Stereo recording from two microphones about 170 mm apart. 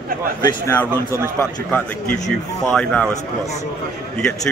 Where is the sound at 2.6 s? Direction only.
5° left (ahead or behind).